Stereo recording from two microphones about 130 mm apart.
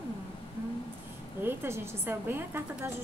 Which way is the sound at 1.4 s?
20° right (ahead or behind).